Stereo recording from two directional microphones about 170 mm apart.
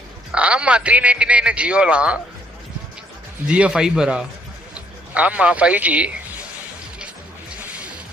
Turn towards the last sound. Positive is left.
turn(degrees=-5)  # may be behind; listen again after turning